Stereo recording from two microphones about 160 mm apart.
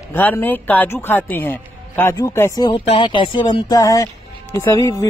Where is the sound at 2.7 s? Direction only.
35° left (ahead or behind); by 5.1 s 20° left (ahead or behind).